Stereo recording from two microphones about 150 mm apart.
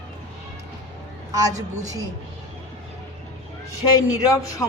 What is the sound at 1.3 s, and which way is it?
Speech, 25° right (ahead or behind).